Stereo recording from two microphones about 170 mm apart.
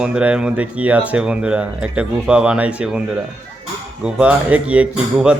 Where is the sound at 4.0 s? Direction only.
10° right (ahead or behind).